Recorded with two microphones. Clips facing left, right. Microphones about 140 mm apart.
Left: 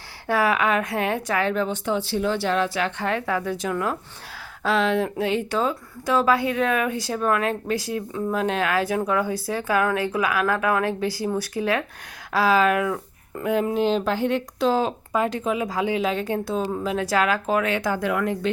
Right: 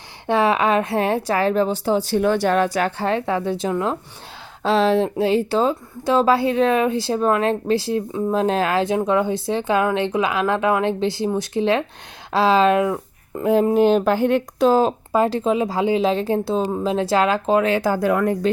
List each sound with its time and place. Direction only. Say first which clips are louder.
0.3 s speech: right 4 dB; 25° right (ahead or behind); by 3.1 s 45° right (ahead or behind)
3.1 s speech: right 4 dB; 30° right (ahead or behind)
13.7 s speech: right 6 dB; 55° right (ahead or behind)